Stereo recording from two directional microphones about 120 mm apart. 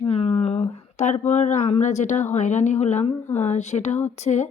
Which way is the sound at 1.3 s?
90° left.